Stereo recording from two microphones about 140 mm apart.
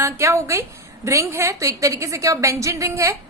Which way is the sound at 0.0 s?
20° right (ahead or behind).